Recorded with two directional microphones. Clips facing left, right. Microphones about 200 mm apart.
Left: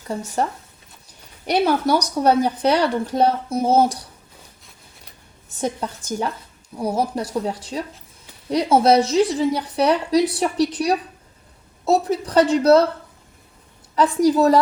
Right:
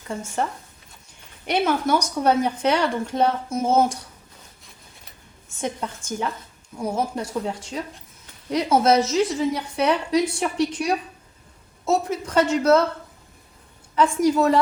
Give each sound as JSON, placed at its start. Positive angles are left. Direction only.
{"t": 0.1, "sound": "speech", "side_deg": 35}
{"t": 5.5, "sound": "speech", "side_deg": 35}
{"t": 13.9, "sound": "speech", "side_deg": 35}